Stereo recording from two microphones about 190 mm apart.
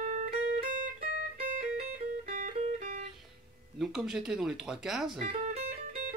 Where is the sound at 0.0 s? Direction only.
40° right (ahead or behind).